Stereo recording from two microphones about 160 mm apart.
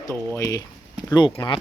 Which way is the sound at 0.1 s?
15° left (ahead or behind).